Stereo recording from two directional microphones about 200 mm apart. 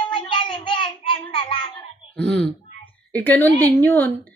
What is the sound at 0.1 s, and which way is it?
Child singing, 25° left (ahead or behind).